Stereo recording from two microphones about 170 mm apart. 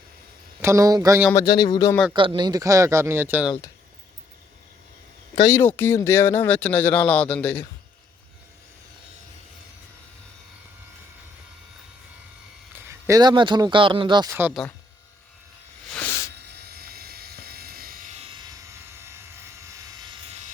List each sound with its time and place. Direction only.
0.6 s speech: 20° right (ahead or behind)
1.3 s speech: 20° left (ahead or behind)
2.1 s speech: 30° right (ahead or behind); by 3.5 s 10° right (ahead or behind)
5.3 s speech: 30° left (ahead or behind)
5.5 s speech: 10° left (ahead or behind)
12.9 s speech: 20° right (ahead or behind)
15.9 s hiss: 10° left (ahead or behind)
16.3 s helicopter: 75° right (ahead or behind); by 18.2 s 55° right (ahead or behind)
18.2 s helicopter: 25° right (ahead or behind)